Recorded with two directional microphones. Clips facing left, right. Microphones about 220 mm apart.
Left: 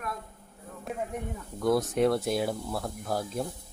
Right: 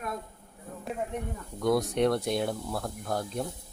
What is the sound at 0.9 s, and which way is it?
Snake, centre (ahead or behind).